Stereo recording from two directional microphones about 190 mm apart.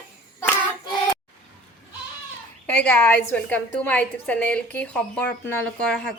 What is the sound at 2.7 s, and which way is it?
Speech, 5° left (ahead or behind).